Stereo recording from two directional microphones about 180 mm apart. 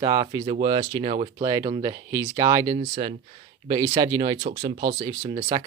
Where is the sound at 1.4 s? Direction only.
20° right (ahead or behind).